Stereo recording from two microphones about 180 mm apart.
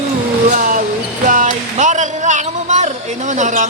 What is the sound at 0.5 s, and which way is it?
Vehicle, 45° right (ahead or behind).